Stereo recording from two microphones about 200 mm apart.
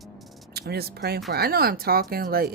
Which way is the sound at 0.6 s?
55° right (ahead or behind).